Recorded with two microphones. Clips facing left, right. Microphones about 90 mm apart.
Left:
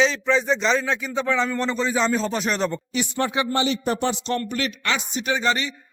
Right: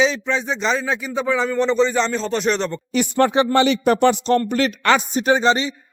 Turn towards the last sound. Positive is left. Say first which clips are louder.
# right 5 dB
turn(degrees=-20)  # may be behind; listen again after turning